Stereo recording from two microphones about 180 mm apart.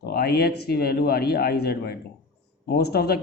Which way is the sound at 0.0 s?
60° left (ahead or behind).